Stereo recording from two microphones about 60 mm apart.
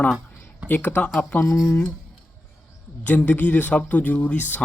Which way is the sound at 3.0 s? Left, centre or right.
Left.